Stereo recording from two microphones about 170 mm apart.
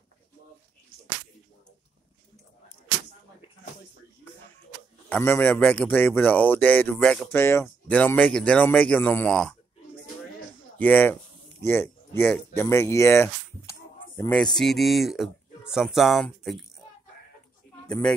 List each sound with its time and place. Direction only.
5.1 s speech: 10° left (ahead or behind)
10.8 s speech: 10° left (ahead or behind)
14.3 s speech: 5° left (ahead or behind)
17.8 s speech: 5° left (ahead or behind)